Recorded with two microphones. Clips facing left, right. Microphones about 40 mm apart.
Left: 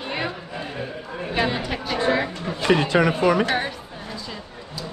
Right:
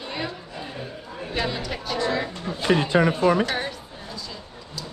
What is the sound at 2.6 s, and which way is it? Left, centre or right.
Speech, left.